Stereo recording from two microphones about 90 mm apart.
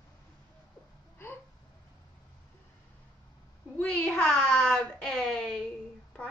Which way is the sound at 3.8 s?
20° left (ahead or behind).